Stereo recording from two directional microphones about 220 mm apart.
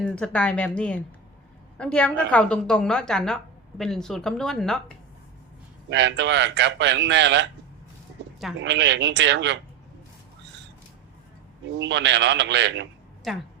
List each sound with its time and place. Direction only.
0.0 s a woman's voice: 5° left (ahead or behind)
5.9 s a man's voice: 50° right (ahead or behind)
8.5 s a man's voice: 55° right (ahead or behind)
11.8 s a man's voice: 55° right (ahead or behind)